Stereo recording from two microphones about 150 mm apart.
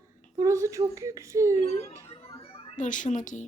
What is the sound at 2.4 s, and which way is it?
Music, 40° left (ahead or behind).